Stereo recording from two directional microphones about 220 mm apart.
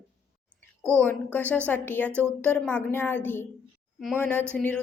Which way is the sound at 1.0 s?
10° left (ahead or behind).